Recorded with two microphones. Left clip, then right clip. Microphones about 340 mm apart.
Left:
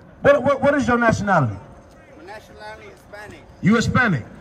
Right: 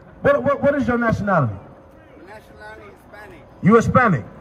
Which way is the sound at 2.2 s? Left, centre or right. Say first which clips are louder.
Left 3 dB; left.